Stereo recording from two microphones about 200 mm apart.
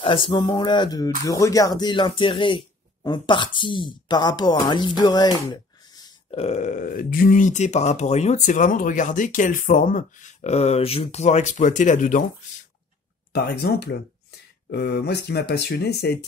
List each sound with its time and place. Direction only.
0.3 s a sound: 25° left (ahead or behind)
1.2 s speech: 15° left (ahead or behind); by 12.3 s 40° left (ahead or behind)
13.3 s speech: 55° left (ahead or behind)